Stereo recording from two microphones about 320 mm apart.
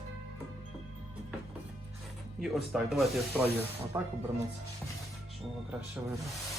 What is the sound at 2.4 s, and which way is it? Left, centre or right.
Speech, centre.